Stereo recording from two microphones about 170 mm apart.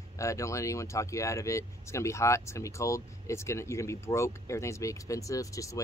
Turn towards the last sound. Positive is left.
turn(degrees=20)  # may be behind; listen again after turning